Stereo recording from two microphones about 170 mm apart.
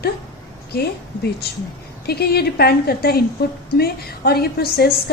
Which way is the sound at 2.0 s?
70° left (ahead or behind).